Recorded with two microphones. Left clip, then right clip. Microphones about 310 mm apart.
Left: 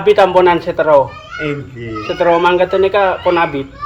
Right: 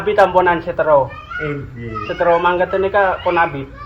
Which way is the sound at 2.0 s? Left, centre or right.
Left.